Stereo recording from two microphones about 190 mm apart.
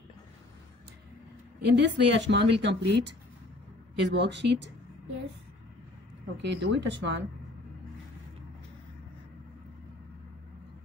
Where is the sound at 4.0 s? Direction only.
65° right (ahead or behind).